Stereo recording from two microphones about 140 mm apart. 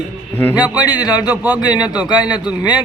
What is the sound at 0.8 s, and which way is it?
A man's voice, 30° left (ahead or behind).